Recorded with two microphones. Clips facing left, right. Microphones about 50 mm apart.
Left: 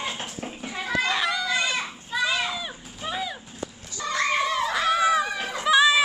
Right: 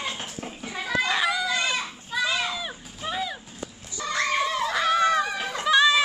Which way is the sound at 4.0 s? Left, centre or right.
Centre.